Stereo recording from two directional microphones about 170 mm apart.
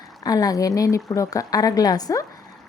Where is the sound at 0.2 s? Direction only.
20° left (ahead or behind).